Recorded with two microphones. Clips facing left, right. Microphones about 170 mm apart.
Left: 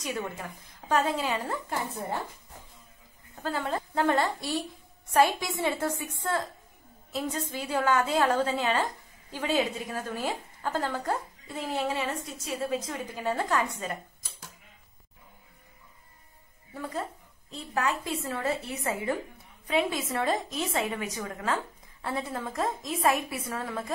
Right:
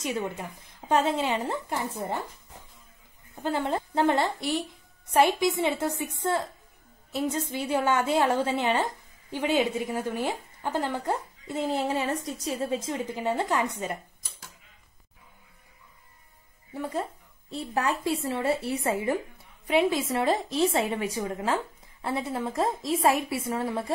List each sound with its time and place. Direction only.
0.0 s a woman's voice: 20° right (ahead or behind)
3.4 s a woman's voice: 25° right (ahead or behind)
16.7 s a woman's voice: 25° right (ahead or behind)